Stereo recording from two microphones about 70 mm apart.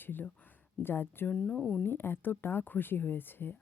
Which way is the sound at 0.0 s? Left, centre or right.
Left.